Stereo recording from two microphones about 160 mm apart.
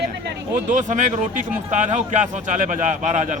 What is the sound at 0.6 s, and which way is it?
Speech, 50° right (ahead or behind).